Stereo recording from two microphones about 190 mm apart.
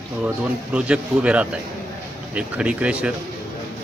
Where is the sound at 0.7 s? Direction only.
5° right (ahead or behind).